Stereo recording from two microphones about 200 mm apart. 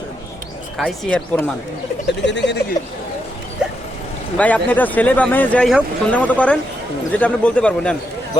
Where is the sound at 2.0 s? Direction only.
60° left (ahead or behind).